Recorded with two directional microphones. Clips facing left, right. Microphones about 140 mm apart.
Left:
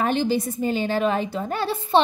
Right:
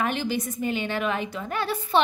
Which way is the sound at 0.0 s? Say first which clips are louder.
Left 5 dB; 30° left (ahead or behind).